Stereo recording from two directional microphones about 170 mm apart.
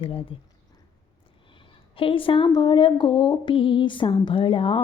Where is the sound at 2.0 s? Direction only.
30° left (ahead or behind).